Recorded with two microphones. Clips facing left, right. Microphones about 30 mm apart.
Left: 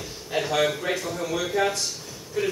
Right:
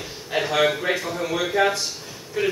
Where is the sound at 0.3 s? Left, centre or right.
Centre.